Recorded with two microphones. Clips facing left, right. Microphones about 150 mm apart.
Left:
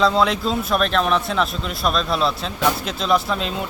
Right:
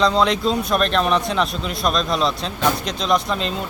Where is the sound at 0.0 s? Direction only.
5° left (ahead or behind).